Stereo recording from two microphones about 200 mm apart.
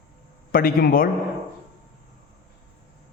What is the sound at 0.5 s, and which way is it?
Speech, 45° left (ahead or behind).